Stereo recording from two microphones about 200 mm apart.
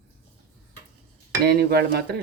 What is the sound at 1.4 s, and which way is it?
Speech, 50° right (ahead or behind).